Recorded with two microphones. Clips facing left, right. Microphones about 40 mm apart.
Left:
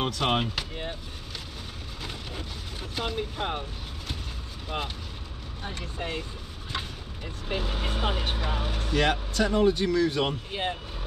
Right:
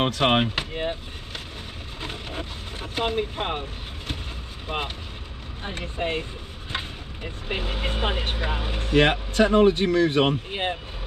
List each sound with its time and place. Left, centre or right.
0.0 s speech: right
2.0 s speech: right
4.6 s speech: right
7.4 s speech: right